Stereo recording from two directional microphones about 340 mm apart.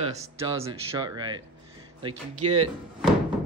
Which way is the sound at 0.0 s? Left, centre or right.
Centre.